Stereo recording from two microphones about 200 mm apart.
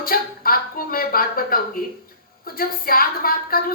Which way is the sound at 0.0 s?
45° left (ahead or behind).